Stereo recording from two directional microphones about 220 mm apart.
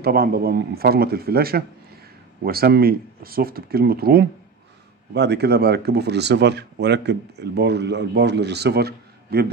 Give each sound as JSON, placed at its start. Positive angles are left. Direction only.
{"t": 0.0, "sound": "speech", "side_deg": -45}